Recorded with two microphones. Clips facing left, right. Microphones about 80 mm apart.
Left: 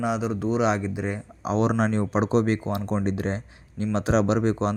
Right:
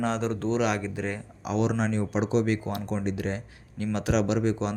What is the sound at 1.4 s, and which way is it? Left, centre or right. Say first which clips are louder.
A man's voice: left 4 dB; left.